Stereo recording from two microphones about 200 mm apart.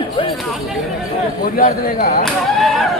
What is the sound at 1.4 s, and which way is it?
Speech, 45° left (ahead or behind).